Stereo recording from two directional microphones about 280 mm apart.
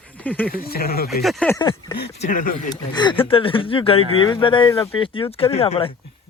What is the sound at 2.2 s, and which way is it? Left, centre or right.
Speech, left.